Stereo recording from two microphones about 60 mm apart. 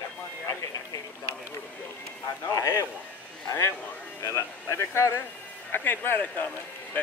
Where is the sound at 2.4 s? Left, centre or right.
Left.